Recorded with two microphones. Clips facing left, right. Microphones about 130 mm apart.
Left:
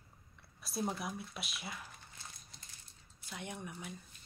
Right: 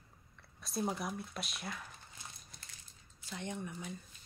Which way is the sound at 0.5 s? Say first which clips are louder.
Right 1 dB; 5° left (ahead or behind).